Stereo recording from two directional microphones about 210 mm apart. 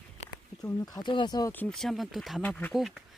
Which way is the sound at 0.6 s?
15° left (ahead or behind).